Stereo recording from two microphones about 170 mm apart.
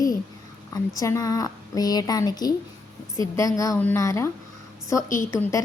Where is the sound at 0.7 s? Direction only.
20° left (ahead or behind).